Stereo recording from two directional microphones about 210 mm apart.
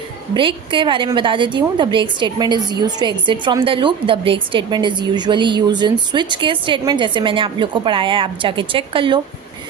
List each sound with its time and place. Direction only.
0.3 s a woman's voice: 25° right (ahead or behind)